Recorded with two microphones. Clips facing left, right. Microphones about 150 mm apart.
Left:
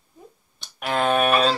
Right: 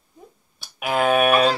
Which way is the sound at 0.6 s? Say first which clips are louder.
Right 2 dB; 10° right (ahead or behind).